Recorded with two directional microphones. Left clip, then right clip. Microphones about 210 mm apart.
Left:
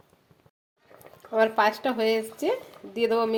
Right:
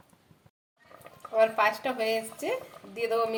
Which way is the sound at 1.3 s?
40° left (ahead or behind).